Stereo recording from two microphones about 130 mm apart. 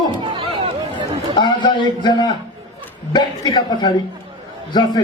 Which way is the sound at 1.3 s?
35° left (ahead or behind).